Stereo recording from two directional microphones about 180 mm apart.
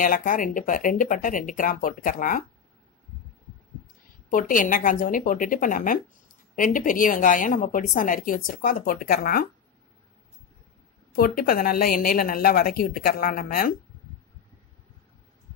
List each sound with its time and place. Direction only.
0.0 s speech: 50° left (ahead or behind)
4.3 s speech: 50° left (ahead or behind)
11.1 s a woman's voice: 55° left (ahead or behind)